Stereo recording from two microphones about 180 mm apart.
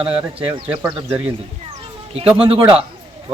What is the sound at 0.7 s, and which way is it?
Speech, 10° right (ahead or behind).